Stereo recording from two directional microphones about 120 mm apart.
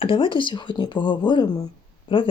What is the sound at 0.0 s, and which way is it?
Speech, 45° left (ahead or behind).